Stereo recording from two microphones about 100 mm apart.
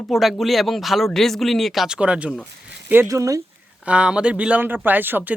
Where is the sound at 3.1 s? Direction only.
35° right (ahead or behind).